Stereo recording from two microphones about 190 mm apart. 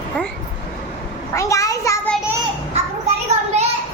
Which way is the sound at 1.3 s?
15° left (ahead or behind).